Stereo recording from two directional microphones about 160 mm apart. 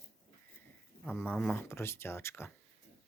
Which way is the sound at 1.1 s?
10° left (ahead or behind).